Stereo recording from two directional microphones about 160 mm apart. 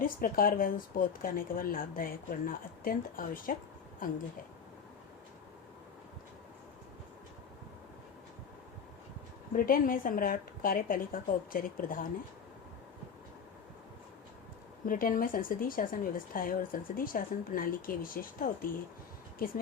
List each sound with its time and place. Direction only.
0.0 s speech: 65° left (ahead or behind)
9.5 s speech: 60° left (ahead or behind)
14.8 s speech: 60° left (ahead or behind)